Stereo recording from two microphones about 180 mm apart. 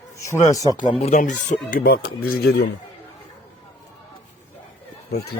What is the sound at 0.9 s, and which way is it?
Speech, 40° left (ahead or behind).